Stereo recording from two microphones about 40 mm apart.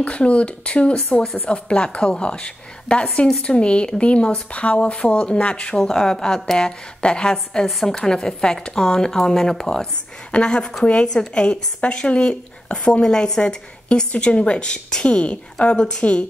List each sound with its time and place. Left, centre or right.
0.0 s a woman's voice: left
5.8 s a woman's voice: centre
7.6 s a woman's voice: centre
16.0 s a woman's voice: left